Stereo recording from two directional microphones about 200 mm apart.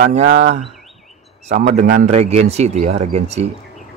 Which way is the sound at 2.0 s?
35° right (ahead or behind).